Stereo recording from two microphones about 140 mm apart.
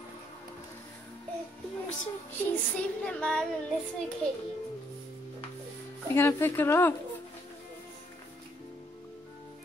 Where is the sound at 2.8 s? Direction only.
5° left (ahead or behind).